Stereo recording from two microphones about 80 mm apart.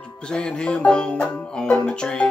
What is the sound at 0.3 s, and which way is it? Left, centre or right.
Music, centre.